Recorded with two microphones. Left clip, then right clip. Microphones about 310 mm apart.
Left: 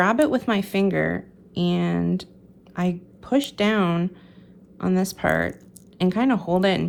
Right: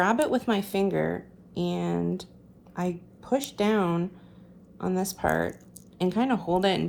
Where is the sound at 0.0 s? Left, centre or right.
Left.